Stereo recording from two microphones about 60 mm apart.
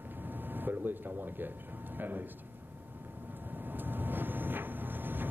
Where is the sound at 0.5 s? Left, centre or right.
Right.